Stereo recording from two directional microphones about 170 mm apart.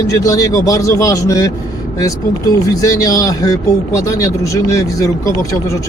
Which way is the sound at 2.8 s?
20° left (ahead or behind).